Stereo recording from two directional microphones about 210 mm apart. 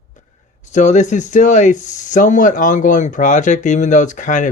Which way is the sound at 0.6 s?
35° left (ahead or behind).